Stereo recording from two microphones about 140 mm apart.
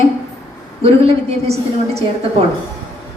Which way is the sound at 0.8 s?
45° right (ahead or behind).